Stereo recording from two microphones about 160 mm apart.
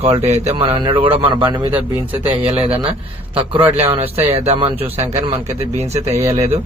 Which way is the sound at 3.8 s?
40° right (ahead or behind).